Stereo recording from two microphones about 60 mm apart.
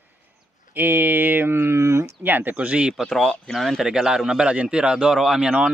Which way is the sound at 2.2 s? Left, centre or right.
Right.